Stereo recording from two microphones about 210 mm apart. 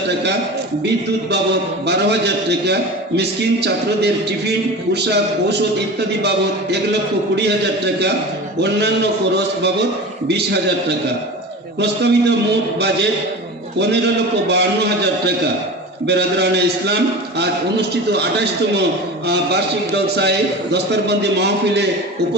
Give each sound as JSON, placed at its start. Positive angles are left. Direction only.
{"t": 0.1, "sound": "a man's voice", "side_deg": -55}
{"t": 1.9, "sound": "a man's voice", "side_deg": -55}
{"t": 10.2, "sound": "a man's voice", "side_deg": -55}